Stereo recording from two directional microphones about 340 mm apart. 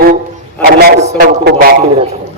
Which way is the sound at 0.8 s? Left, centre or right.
Right.